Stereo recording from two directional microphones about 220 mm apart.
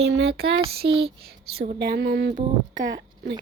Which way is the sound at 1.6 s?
45° right (ahead or behind).